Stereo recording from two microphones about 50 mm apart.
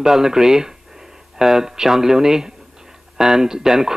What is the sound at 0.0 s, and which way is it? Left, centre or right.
Speech, centre.